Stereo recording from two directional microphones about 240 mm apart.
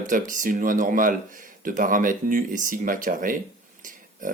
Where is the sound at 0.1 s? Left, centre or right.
Right.